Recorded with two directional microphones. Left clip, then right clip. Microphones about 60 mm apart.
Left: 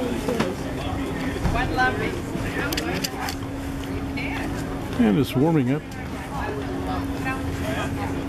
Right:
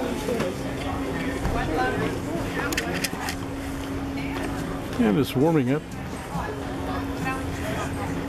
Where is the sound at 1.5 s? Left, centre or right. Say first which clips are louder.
Left 4 dB; left.